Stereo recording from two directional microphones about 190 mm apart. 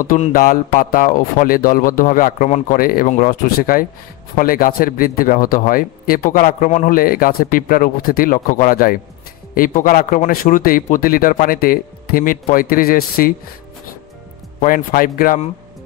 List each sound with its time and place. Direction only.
0.0 s speech: 45° left (ahead or behind)
14.6 s speech: 45° left (ahead or behind)